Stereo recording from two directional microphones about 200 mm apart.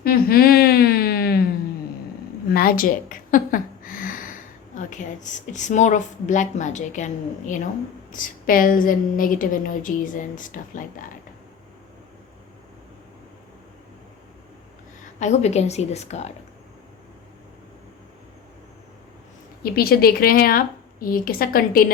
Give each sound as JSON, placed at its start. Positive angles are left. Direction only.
{"t": 0.0, "sound": "a sound", "side_deg": 50}
{"t": 2.5, "sound": "a woman's voice", "side_deg": 50}
{"t": 15.2, "sound": "a woman's voice", "side_deg": 35}
{"t": 19.7, "sound": "a woman's voice", "side_deg": 50}